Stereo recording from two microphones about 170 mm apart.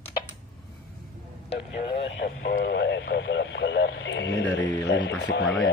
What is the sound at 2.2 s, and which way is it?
Speech, 90° left.